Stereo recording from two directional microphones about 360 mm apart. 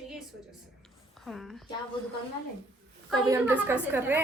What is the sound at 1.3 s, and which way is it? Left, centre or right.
Speech, centre.